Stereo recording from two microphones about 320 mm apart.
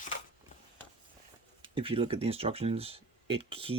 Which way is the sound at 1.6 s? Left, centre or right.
Centre.